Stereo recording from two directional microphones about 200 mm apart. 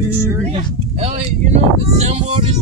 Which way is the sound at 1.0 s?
35° right (ahead or behind).